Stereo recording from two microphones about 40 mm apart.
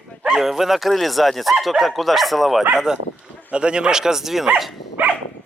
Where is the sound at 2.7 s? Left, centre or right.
Centre.